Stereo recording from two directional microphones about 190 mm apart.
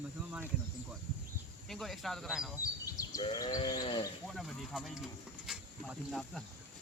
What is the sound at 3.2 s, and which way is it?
Sheep, 20° left (ahead or behind).